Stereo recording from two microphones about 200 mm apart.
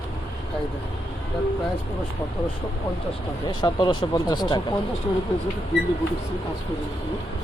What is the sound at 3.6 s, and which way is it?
Speech, 20° left (ahead or behind).